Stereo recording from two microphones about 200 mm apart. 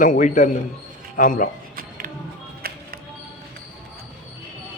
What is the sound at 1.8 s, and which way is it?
Music, 45° right (ahead or behind).